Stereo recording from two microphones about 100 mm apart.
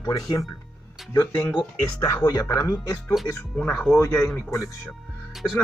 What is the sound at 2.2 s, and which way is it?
Speech, 40° left (ahead or behind).